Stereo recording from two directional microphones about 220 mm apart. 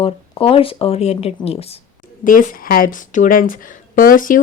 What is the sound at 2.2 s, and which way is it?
A woman's voice, 40° left (ahead or behind).